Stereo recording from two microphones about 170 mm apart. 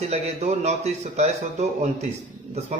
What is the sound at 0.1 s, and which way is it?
A man's voice, 40° right (ahead or behind).